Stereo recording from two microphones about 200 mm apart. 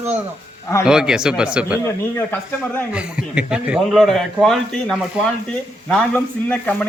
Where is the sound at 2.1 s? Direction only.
10° left (ahead or behind).